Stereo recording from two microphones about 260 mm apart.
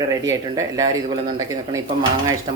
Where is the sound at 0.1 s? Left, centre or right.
Centre.